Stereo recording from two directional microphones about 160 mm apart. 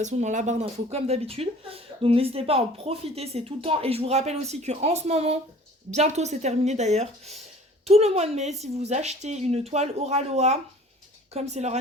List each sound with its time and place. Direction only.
0.0 s speech: 45° right (ahead or behind)